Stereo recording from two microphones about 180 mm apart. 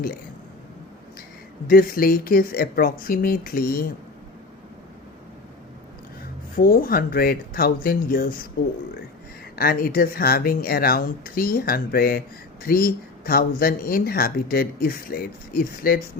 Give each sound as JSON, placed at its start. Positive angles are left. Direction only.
{"t": 1.6, "sound": "speech", "side_deg": 55}
{"t": 6.6, "sound": "speech", "side_deg": 55}
{"t": 9.6, "sound": "speech", "side_deg": 55}